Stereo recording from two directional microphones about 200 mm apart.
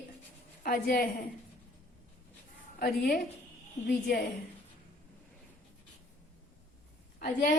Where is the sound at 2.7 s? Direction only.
50° left (ahead or behind).